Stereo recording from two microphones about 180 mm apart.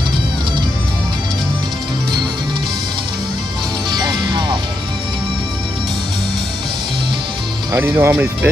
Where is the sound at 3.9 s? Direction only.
25° right (ahead or behind).